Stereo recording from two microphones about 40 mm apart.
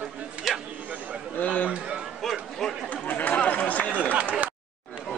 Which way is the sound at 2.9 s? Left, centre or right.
Left.